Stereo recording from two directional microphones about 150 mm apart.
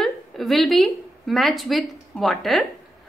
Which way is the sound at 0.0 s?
Centre (ahead or behind).